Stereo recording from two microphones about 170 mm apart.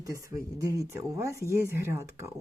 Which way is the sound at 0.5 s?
20° right (ahead or behind).